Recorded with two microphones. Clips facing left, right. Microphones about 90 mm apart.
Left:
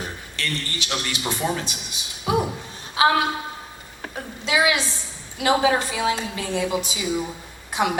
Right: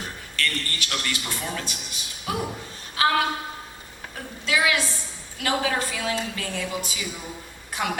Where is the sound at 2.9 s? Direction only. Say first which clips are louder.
Left 3 dB; 20° left (ahead or behind).